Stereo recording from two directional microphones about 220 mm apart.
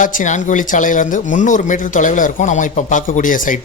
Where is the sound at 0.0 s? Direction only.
35° left (ahead or behind).